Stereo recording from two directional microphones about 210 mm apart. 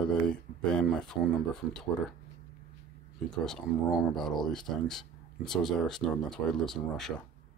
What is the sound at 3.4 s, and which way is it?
Speech, centre (ahead or behind).